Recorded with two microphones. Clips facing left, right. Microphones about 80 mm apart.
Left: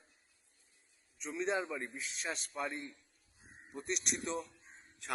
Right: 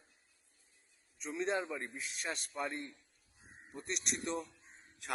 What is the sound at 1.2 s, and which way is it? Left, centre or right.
A man's voice, centre.